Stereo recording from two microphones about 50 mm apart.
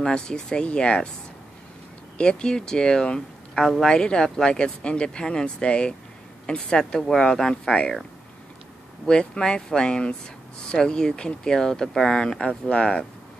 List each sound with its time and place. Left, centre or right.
0.0 s speech: centre
2.1 s speech: centre
9.0 s speech: centre